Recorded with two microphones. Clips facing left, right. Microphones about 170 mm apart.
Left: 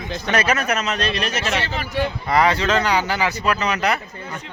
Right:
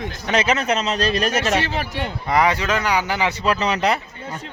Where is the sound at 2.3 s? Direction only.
15° right (ahead or behind).